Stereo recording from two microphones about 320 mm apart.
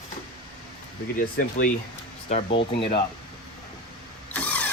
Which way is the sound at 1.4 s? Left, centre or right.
Left.